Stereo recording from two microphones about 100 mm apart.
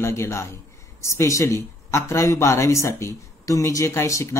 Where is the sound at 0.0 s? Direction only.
25° left (ahead or behind).